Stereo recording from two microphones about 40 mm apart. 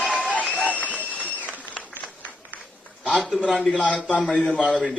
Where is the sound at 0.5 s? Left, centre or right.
Left.